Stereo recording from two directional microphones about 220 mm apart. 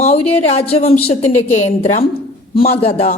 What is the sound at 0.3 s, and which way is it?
A woman's voice, 30° left (ahead or behind).